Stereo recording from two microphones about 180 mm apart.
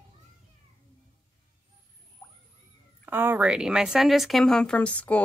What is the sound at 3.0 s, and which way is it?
Speech, 10° right (ahead or behind).